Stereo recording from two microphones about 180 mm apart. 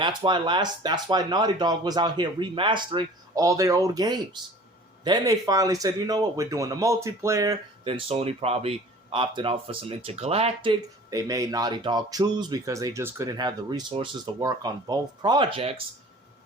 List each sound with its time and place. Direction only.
0.0 s speech: 25° right (ahead or behind)
7.9 s speech: 30° right (ahead or behind)